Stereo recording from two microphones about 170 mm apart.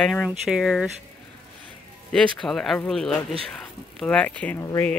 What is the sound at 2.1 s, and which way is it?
Speech, 5° left (ahead or behind).